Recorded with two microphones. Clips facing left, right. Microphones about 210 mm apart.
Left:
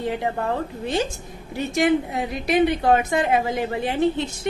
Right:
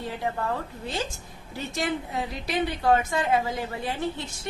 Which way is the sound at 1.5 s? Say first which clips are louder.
Left 9 dB; 15° left (ahead or behind).